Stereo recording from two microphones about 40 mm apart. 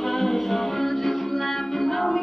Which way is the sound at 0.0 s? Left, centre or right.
Centre.